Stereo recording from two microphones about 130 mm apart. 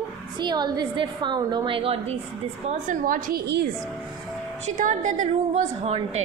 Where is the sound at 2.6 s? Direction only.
90° right.